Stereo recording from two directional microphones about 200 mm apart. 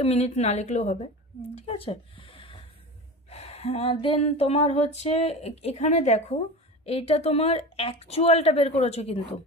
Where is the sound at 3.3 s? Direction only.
30° left (ahead or behind).